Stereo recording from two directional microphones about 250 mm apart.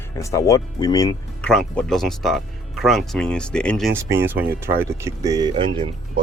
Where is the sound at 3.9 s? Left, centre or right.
Centre.